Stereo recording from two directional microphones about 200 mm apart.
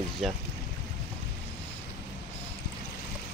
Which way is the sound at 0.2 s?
Centre (ahead or behind).